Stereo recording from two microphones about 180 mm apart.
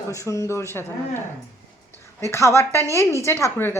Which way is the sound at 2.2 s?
15° left (ahead or behind).